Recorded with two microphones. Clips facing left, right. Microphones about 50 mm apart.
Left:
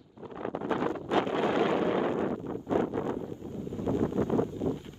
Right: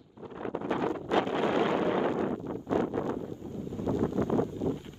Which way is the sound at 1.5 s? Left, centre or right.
Right.